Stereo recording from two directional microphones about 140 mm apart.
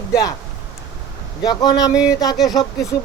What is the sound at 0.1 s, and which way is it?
Speech, 25° left (ahead or behind).